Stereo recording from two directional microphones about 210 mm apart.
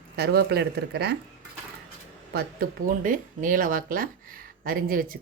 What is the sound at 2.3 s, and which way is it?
Speech, 40° right (ahead or behind).